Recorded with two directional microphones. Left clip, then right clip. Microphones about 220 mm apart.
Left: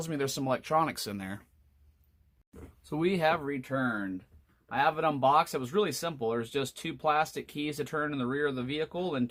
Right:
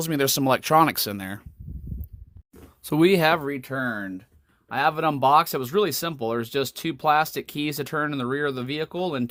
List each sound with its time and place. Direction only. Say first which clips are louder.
0.0 s speech: right 10 dB; 40° right (ahead or behind)
2.8 s speech: right 9 dB; 45° right (ahead or behind)